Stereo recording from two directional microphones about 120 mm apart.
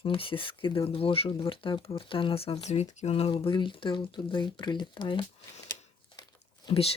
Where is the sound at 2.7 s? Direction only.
65° left (ahead or behind); by 5.2 s 40° left (ahead or behind).